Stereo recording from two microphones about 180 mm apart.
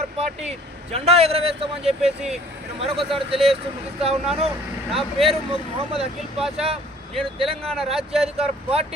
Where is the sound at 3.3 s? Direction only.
30° right (ahead or behind).